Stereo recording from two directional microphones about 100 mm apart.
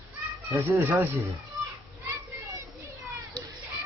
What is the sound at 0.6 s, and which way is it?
Speech, 20° right (ahead or behind).